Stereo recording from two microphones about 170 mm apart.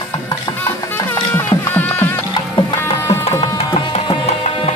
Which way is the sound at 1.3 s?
10° left (ahead or behind).